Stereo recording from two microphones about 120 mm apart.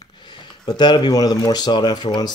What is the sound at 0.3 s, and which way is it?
Speech, 35° left (ahead or behind).